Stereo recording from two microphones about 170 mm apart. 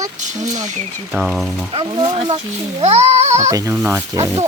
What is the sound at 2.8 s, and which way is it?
Speech, 40° right (ahead or behind).